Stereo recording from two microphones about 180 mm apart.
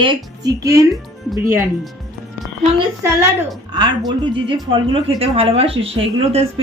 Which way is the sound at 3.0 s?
15° right (ahead or behind).